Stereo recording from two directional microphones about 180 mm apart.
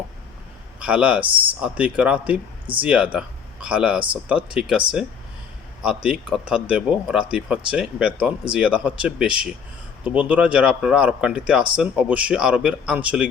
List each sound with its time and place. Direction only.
0.8 s speech: 5° right (ahead or behind)
1.2 s speech: 30° right (ahead or behind)
1.6 s speech: 5° right (ahead or behind)
5.8 s speech: 5° right (ahead or behind)